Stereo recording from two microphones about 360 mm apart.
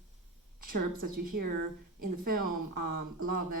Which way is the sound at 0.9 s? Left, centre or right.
Right.